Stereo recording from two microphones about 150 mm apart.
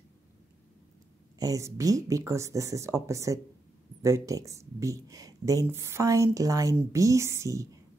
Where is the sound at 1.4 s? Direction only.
20° right (ahead or behind).